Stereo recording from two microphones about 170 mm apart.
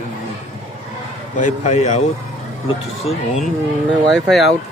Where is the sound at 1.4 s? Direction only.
45° left (ahead or behind).